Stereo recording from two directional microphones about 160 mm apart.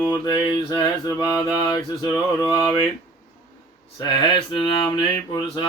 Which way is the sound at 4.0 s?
30° left (ahead or behind).